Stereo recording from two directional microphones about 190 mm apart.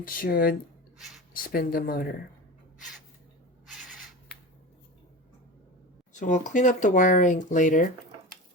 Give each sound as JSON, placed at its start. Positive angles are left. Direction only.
{"t": 0.0, "sound": "speech", "side_deg": 50}
{"t": 0.9, "sound": "a sound", "side_deg": 0}
{"t": 1.3, "sound": "speech", "side_deg": 50}
{"t": 6.1, "sound": "speech", "side_deg": 40}